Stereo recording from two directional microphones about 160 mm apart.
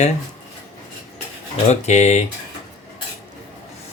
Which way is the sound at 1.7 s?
45° left (ahead or behind).